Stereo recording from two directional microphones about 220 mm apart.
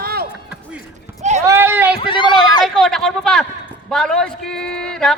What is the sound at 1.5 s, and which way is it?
Speech, 10° right (ahead or behind).